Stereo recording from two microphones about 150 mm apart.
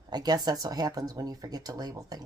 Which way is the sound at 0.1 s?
25° right (ahead or behind).